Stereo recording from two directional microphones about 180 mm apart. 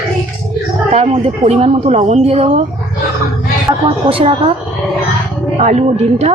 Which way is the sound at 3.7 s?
20° right (ahead or behind).